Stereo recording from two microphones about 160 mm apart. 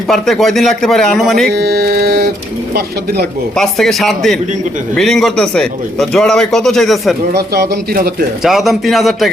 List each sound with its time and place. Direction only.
0.1 s speech: centre (ahead or behind)
1.5 s a sound: 85° right
3.5 s speech: centre (ahead or behind)
7.3 s speech: 90° right
8.4 s speech: centre (ahead or behind)